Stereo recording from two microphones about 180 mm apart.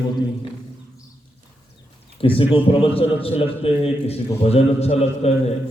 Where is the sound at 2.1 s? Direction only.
30° left (ahead or behind).